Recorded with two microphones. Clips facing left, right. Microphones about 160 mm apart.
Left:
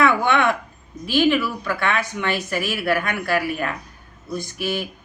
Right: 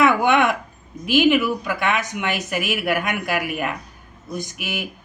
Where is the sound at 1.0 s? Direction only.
15° right (ahead or behind).